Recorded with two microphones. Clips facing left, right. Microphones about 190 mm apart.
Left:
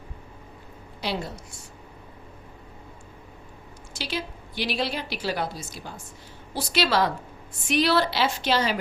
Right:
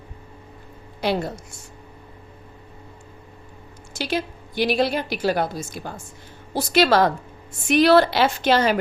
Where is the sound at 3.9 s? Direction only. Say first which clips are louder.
Right 6 dB; 50° right (ahead or behind).